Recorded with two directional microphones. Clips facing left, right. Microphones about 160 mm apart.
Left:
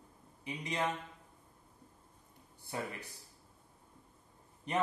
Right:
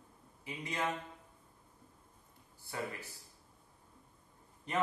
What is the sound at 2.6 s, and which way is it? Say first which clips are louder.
Speech: left 1 dB; 20° left (ahead or behind).